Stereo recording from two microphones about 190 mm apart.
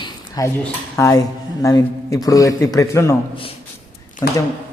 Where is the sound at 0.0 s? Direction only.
15° left (ahead or behind).